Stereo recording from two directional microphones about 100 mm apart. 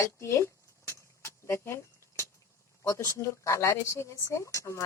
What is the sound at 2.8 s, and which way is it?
Speech, 30° left (ahead or behind).